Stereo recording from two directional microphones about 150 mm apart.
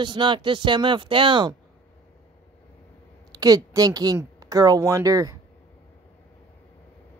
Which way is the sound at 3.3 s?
25° right (ahead or behind).